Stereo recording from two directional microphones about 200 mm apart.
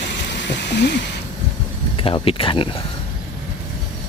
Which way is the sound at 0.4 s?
60° left (ahead or behind).